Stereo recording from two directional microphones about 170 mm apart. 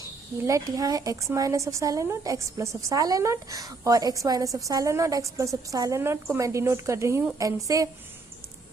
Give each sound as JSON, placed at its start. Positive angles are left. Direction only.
{"t": 0.4, "sound": "a woman's voice", "side_deg": -20}